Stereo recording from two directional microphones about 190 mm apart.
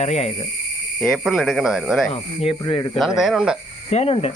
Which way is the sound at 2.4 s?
25° left (ahead or behind).